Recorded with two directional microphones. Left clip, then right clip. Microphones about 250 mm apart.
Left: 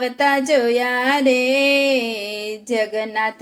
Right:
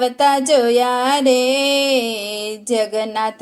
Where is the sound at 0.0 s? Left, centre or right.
Centre.